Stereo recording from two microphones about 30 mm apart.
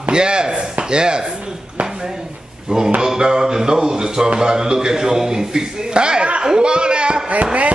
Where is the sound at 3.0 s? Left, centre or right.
Right.